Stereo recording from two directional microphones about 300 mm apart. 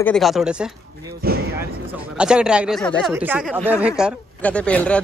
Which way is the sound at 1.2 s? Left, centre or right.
Right.